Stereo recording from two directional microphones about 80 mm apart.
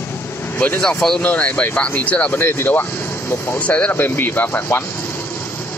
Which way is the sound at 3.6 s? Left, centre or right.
Centre.